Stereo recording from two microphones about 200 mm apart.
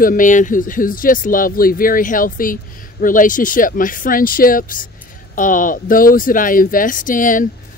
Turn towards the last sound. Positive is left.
turn(degrees=40)  # may be behind; listen again after turning